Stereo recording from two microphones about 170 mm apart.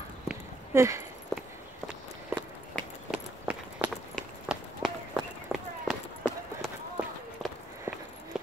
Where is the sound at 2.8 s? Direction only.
5° left (ahead or behind).